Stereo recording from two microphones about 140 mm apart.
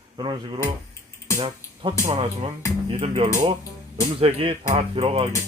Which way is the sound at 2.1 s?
45° right (ahead or behind).